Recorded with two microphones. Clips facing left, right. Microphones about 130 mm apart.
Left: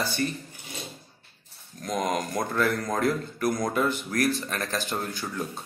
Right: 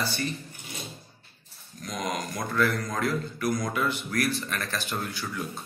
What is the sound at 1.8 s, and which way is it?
Speech, 50° left (ahead or behind).